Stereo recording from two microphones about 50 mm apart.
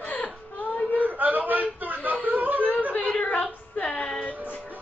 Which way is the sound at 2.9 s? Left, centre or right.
Left.